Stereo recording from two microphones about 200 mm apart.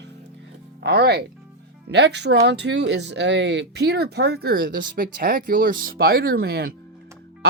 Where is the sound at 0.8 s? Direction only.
55° right (ahead or behind).